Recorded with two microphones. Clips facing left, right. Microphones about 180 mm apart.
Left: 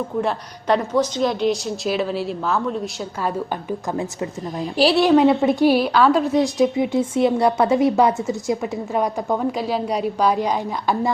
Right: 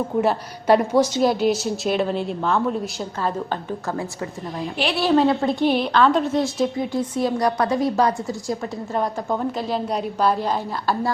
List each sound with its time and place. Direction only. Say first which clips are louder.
0.2 s a woman's voice: right 4 dB; 5° right (ahead or behind); by 5.5 s 20° left (ahead or behind)
5.6 s a woman's voice: left 2 dB; 5° left (ahead or behind)
6.7 s a woman's voice: left 4 dB; 25° left (ahead or behind)
8.9 s a woman's voice: left 2 dB; centre (ahead or behind); by 11.1 s 15° left (ahead or behind)